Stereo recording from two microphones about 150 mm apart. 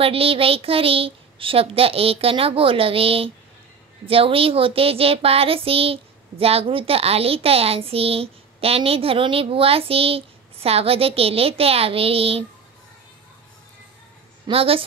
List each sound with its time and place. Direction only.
0.0 s speech: 40° right (ahead or behind)
14.5 s speech: 40° right (ahead or behind)